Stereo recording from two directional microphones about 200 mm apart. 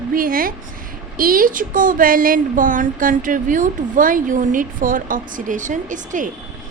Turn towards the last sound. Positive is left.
turn(degrees=-40)  # may be behind; listen again after turning